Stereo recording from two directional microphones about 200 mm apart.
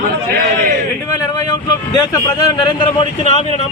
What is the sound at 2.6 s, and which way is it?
Speech, 25° left (ahead or behind).